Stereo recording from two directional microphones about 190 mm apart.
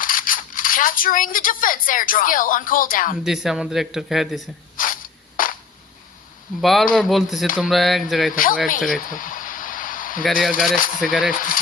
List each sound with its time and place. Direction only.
0.0 s speech: 45° left (ahead or behind)
3.2 s speech: centre (ahead or behind)
4.8 s a sound: 45° left (ahead or behind)
6.6 s speech: centre (ahead or behind)
8.3 s speech: 45° left (ahead or behind)
9.0 s a sound: 45° left (ahead or behind)
10.8 s speech: 45° left (ahead or behind)
11.0 s speech: centre (ahead or behind)
11.3 s speech: 45° left (ahead or behind)